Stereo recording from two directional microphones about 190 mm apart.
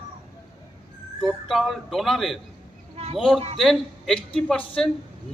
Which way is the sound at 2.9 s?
35° right (ahead or behind).